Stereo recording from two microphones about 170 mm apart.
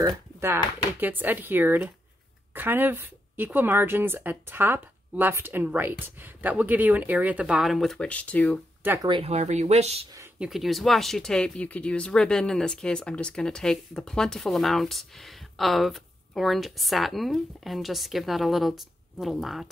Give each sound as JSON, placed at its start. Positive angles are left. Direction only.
{"t": 0.4, "sound": "speech", "side_deg": -10}
{"t": 9.0, "sound": "speech", "side_deg": -30}
{"t": 10.4, "sound": "speech", "side_deg": 0}